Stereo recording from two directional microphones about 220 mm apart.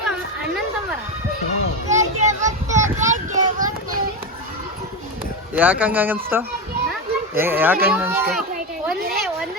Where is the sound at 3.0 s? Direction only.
35° right (ahead or behind).